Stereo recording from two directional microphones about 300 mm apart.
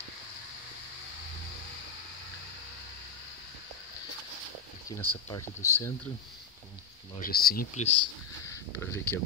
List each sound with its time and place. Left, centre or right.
4.8 s speech: centre
7.2 s speech: left
8.5 s speech: centre